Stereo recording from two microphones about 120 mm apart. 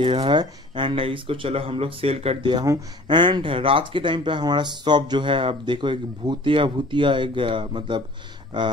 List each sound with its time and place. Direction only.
0.0 s speech: 45° right (ahead or behind)
2.5 s speech: 30° right (ahead or behind)
3.1 s speech: 40° right (ahead or behind)